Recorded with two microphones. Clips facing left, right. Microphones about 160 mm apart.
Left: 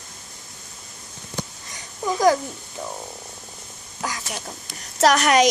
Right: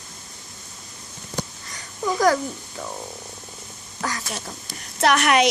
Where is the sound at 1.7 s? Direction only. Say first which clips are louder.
Even; 20° left (ahead or behind).